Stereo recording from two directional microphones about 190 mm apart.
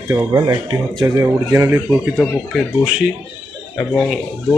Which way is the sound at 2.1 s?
5° left (ahead or behind).